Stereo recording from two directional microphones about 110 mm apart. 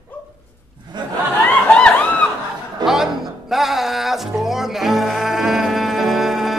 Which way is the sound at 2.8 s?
40° right (ahead or behind).